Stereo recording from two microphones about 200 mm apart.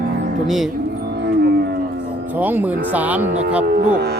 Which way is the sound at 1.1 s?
55° right (ahead or behind).